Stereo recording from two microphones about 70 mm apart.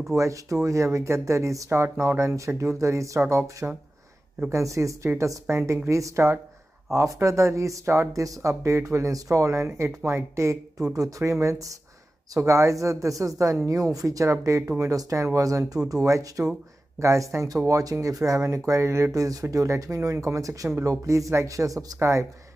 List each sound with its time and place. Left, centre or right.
0.1 s speech: right
1.7 s speech: right
10.9 s speech: right
19.1 s speech: right